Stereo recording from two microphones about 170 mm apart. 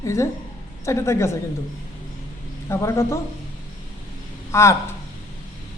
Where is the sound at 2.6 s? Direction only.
15° left (ahead or behind).